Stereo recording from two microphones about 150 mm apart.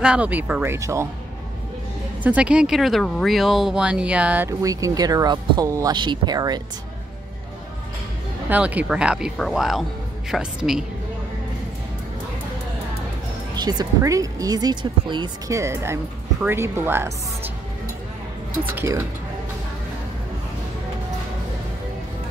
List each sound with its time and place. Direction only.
0.0 s speech: 10° right (ahead or behind)
2.2 s speech: 10° right (ahead or behind)
4.5 s speech: 20° right (ahead or behind)
8.5 s speech: 10° right (ahead or behind)
13.6 s speech: 25° right (ahead or behind)